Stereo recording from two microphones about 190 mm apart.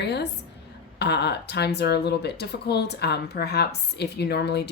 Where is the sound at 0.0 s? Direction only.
60° left (ahead or behind).